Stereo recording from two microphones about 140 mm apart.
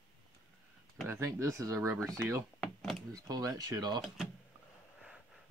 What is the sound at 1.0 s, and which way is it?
Speech, 20° right (ahead or behind).